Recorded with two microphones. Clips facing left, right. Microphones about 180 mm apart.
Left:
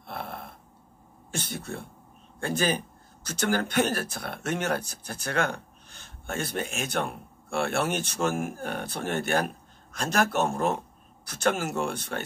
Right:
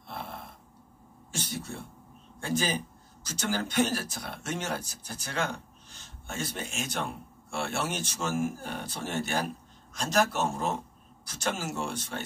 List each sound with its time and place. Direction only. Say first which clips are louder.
0.0 s snoring: left 3 dB; 60° left (ahead or behind)
1.3 s speech: left 2 dB; 60° left (ahead or behind)